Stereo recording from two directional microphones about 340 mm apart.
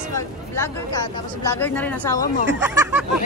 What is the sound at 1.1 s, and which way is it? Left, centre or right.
Speech, centre.